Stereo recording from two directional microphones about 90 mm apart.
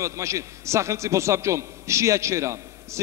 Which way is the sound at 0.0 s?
35° right (ahead or behind).